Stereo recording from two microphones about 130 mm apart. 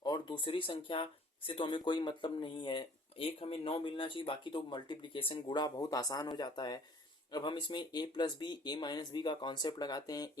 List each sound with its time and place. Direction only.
0.0 s speech: 35° left (ahead or behind)